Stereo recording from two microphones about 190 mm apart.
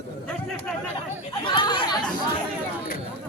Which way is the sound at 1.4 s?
25° left (ahead or behind).